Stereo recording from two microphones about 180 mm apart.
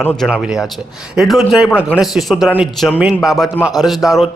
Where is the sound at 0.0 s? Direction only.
10° left (ahead or behind).